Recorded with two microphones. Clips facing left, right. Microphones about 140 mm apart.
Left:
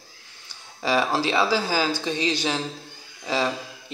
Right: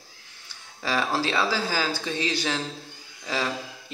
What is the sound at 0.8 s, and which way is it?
Speech, 15° left (ahead or behind).